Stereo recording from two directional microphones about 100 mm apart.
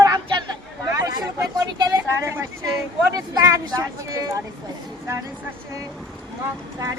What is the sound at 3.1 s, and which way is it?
Speech, 40° right (ahead or behind).